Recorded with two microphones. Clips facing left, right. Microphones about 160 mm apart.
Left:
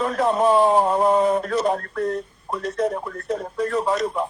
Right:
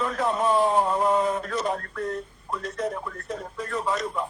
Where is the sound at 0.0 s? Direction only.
35° left (ahead or behind).